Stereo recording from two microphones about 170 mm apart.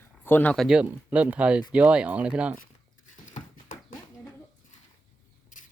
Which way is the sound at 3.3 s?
50° left (ahead or behind).